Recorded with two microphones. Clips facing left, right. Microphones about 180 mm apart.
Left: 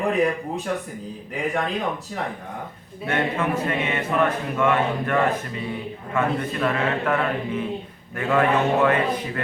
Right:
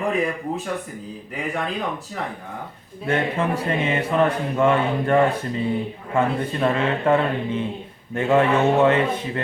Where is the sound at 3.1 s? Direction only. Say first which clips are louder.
Right 2 dB; 30° right (ahead or behind).